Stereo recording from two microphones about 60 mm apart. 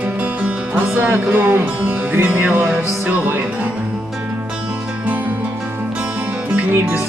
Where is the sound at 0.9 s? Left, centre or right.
Right.